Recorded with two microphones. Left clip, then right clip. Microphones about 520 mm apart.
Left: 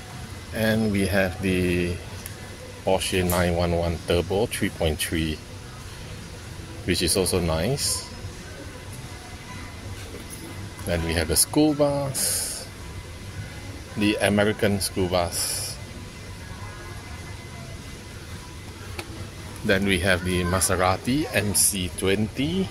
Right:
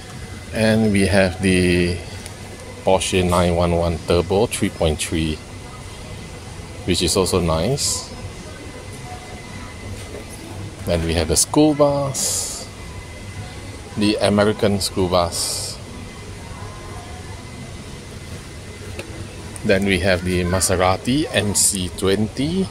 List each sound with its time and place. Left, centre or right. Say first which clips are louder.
0.6 s speech: right 6 dB; left
6.9 s speech: right 5 dB; left
10.9 s speech: right 5 dB; left
13.9 s speech: right 4 dB; left
19.6 s speech: right 5 dB; left